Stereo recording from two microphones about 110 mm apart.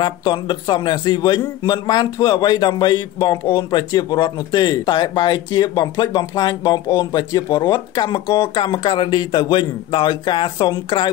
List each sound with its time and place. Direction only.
0.0 s a man's voice: 45° left (ahead or behind)